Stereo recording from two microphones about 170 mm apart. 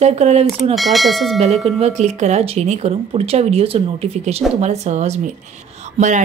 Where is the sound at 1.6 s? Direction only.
40° right (ahead or behind).